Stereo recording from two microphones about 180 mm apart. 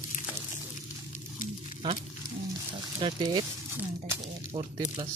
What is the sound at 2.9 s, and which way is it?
Speech, 25° right (ahead or behind).